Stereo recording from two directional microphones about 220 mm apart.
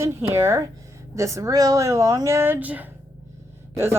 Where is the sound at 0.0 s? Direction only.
10° right (ahead or behind).